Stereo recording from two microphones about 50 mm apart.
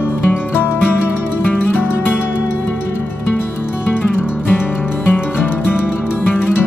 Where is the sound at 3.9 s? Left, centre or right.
Left.